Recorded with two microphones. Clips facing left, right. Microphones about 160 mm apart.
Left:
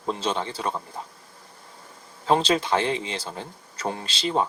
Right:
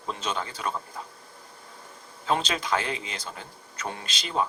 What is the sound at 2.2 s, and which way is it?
Speech, 30° left (ahead or behind).